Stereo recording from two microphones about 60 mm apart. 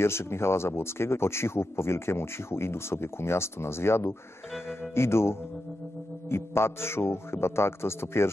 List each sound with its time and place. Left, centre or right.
0.0 s speech: left